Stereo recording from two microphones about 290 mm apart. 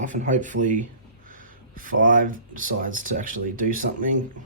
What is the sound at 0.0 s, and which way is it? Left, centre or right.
Speech, right.